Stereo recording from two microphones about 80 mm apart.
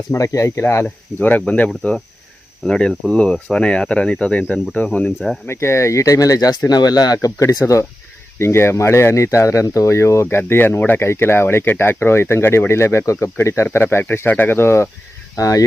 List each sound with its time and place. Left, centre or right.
0.1 s speech: left
1.2 s speech: centre
5.5 s speech: left
7.4 s speech: left
10.2 s speech: left
15.4 s speech: left